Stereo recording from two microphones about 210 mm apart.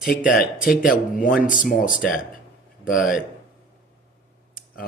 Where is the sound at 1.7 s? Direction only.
40° left (ahead or behind).